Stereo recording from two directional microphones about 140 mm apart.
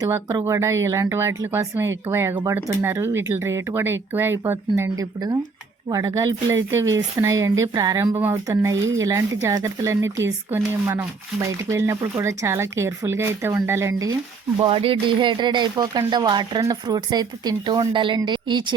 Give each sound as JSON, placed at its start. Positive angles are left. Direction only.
{"t": 0.0, "sound": "speech", "side_deg": -25}
{"t": 4.8, "sound": "speech", "side_deg": -25}
{"t": 14.6, "sound": "a woman's voice", "side_deg": -40}